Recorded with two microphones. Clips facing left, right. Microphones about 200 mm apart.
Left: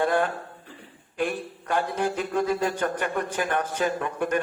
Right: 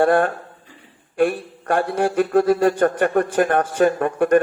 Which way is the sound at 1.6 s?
55° right (ahead or behind).